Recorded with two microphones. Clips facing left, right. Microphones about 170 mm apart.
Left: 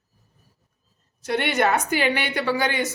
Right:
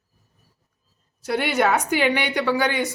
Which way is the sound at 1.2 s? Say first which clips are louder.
Right 1 dB; 5° right (ahead or behind).